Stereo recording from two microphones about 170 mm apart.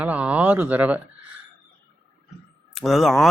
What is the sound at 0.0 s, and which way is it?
Speech, 10° right (ahead or behind).